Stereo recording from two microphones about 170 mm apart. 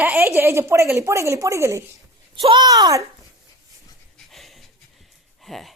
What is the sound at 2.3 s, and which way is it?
Speech, 30° right (ahead or behind).